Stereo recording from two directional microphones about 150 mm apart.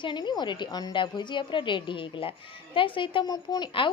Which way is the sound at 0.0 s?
30° left (ahead or behind).